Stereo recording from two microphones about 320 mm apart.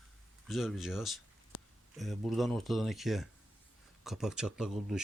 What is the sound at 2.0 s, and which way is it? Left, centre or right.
Speech, centre.